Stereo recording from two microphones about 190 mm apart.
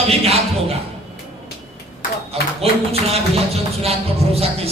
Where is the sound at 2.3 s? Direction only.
30° right (ahead or behind).